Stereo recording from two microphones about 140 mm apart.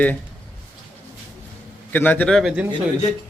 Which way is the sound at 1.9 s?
15° left (ahead or behind).